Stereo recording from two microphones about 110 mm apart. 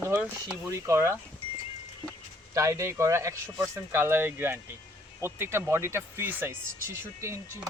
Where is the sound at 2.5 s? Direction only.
25° right (ahead or behind).